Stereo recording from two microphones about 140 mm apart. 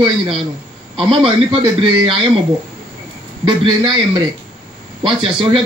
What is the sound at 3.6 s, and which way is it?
A man's voice, 35° right (ahead or behind).